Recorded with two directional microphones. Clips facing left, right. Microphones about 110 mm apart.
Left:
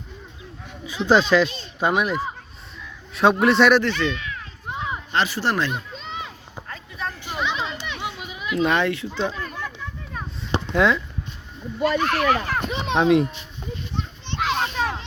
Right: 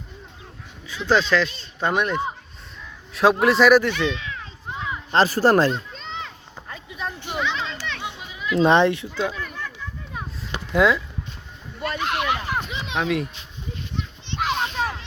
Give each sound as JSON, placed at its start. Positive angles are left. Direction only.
{"t": 0.9, "sound": "speech", "side_deg": 15}
{"t": 1.9, "sound": "speech", "side_deg": 5}
{"t": 4.7, "sound": "a sound", "side_deg": 25}
{"t": 5.1, "sound": "a child's voice", "side_deg": -40}
{"t": 5.7, "sound": "children playing", "side_deg": 5}
{"t": 6.7, "sound": "a sound", "side_deg": -10}
{"t": 7.3, "sound": "children playing", "side_deg": 15}
{"t": 8.5, "sound": "speech", "side_deg": -25}
{"t": 9.3, "sound": "a sound", "side_deg": 15}
{"t": 10.7, "sound": "speech", "side_deg": -5}
{"t": 12.0, "sound": "speech", "side_deg": -15}
{"t": 12.8, "sound": "a child's voice", "side_deg": 30}
{"t": 13.9, "sound": "children playing", "side_deg": 35}
{"t": 14.3, "sound": "children playing", "side_deg": -10}